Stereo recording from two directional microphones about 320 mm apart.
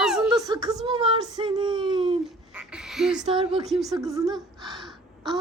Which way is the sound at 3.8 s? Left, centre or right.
Centre.